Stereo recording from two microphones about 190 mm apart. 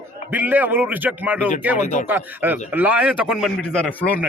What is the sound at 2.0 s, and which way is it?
A man's voice, 10° right (ahead or behind).